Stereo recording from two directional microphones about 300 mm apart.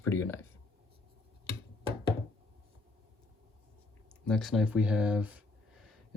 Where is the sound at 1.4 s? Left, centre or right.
Centre.